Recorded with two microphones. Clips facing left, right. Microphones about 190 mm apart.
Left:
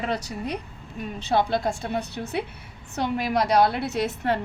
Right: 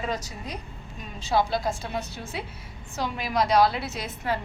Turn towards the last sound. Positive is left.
turn(degrees=65)  # may be behind; listen again after turning